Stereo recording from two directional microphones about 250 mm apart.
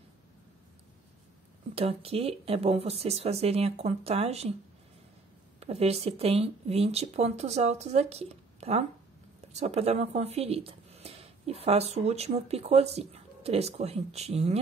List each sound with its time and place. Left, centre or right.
1.8 s speech: right
5.6 s speech: right